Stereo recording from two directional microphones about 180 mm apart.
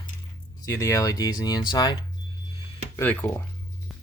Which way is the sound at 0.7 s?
15° left (ahead or behind).